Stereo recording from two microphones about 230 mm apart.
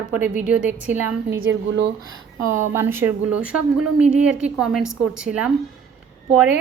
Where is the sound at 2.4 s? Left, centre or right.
Centre.